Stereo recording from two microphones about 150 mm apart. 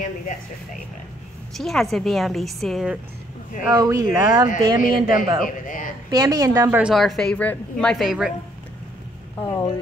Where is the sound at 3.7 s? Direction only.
25° right (ahead or behind).